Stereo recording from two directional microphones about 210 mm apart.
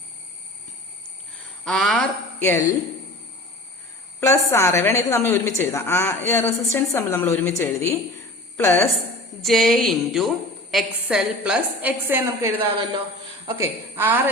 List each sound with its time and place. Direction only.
1.6 s a woman's voice: centre (ahead or behind)
4.2 s a woman's voice: 15° left (ahead or behind)
9.4 s a woman's voice: centre (ahead or behind)
13.6 s a woman's voice: 10° right (ahead or behind)